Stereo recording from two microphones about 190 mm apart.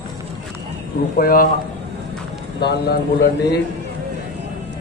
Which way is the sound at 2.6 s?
55° left (ahead or behind).